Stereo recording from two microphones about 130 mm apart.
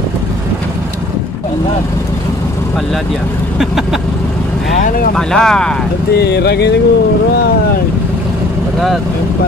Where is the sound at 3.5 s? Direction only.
5° right (ahead or behind).